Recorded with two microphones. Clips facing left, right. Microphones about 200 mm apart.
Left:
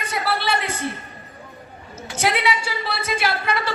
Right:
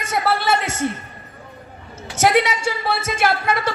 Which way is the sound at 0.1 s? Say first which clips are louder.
Right 4 dB; 45° right (ahead or behind).